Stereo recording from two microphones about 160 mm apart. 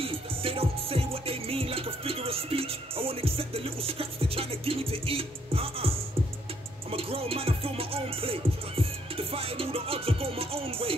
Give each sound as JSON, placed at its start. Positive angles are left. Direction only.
{"t": 0.0, "sound": "music", "side_deg": -35}